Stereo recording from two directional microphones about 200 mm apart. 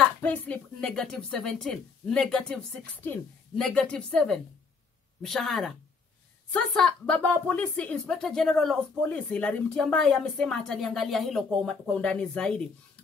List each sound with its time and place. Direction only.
0.2 s speech: 5° left (ahead or behind)